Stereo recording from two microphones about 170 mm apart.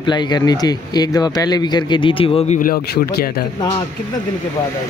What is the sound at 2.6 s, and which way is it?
Speech, 60° left (ahead or behind).